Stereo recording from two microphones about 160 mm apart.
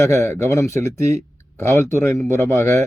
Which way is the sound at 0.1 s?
15° left (ahead or behind).